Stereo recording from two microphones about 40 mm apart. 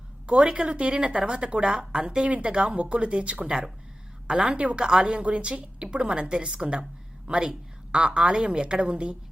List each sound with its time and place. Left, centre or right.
0.3 s a woman's voice: right